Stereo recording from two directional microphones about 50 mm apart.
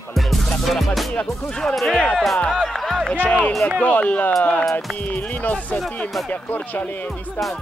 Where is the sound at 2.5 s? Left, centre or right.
Centre.